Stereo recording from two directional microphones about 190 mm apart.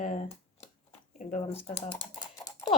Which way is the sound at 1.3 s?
35° left (ahead or behind).